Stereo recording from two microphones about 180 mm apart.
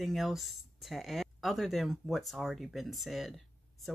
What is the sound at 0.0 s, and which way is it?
Speech, centre (ahead or behind).